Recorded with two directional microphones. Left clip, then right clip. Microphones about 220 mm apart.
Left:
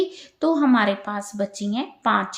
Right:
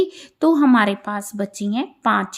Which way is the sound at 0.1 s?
40° right (ahead or behind).